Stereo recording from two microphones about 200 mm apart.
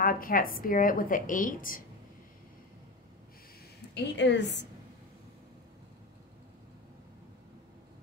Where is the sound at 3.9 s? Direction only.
60° left (ahead or behind).